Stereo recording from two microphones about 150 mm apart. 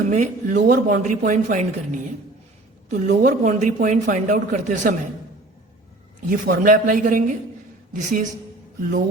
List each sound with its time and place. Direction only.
0.0 s speech: 55° right (ahead or behind)
6.2 s speech: 65° right (ahead or behind)